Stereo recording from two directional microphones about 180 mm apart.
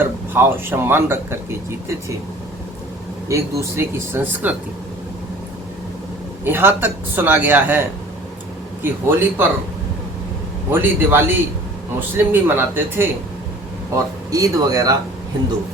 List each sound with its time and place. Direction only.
0.0 s speech: 10° right (ahead or behind)
3.2 s speech: 15° right (ahead or behind)
6.4 s speech: 10° right (ahead or behind)
8.8 s speech: 10° right (ahead or behind)
10.7 s speech: 10° right (ahead or behind)